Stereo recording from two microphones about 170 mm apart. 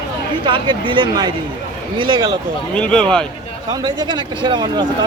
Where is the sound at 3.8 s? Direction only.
25° right (ahead or behind).